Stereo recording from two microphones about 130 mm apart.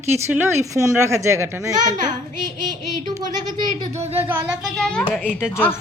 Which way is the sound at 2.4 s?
35° right (ahead or behind).